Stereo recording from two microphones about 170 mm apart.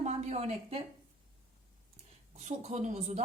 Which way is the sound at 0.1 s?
40° right (ahead or behind).